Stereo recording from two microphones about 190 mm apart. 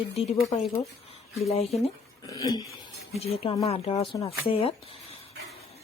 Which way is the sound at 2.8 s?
30° left (ahead or behind).